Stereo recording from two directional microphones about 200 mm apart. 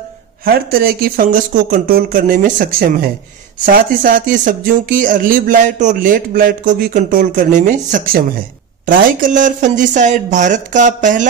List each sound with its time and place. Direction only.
0.5 s speech: 50° right (ahead or behind)